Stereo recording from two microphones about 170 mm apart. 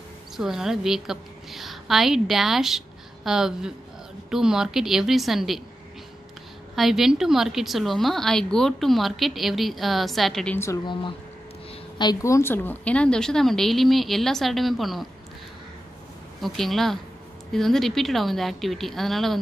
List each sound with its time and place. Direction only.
0.4 s a woman's voice: 5° right (ahead or behind)
6.7 s a woman's voice: centre (ahead or behind)
10.9 s a woman's voice: 30° left (ahead or behind); by 15.0 s centre (ahead or behind)
16.3 s a woman's voice: centre (ahead or behind)